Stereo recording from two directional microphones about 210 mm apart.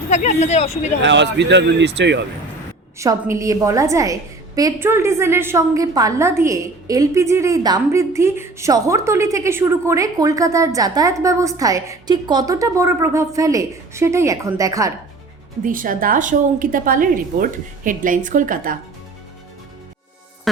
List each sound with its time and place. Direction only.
0.1 s speech: 35° left (ahead or behind)
1.0 s speech: 60° right (ahead or behind)
3.0 s a woman's voice: 15° right (ahead or behind)
15.6 s a woman's voice: 40° right (ahead or behind)